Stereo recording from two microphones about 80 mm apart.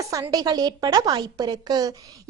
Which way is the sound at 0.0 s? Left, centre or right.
Right.